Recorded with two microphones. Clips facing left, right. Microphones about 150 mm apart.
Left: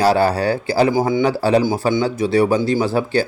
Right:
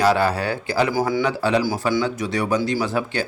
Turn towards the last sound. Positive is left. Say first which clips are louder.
# left 5 dB
turn(degrees=35)  # may be behind; listen again after turning